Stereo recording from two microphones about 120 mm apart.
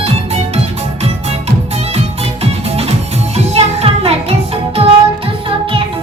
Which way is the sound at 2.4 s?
55° right (ahead or behind).